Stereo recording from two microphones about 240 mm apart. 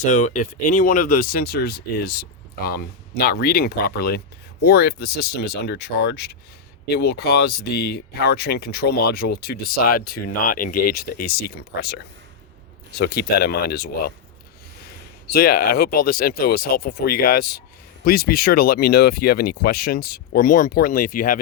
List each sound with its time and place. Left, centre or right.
0.0 s speech: left
15.3 s speech: left